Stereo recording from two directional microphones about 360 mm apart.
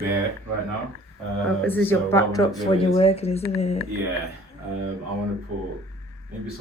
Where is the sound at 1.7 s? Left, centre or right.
Centre.